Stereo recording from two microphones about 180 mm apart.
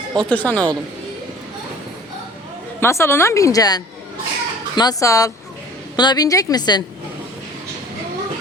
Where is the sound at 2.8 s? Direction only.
15° left (ahead or behind).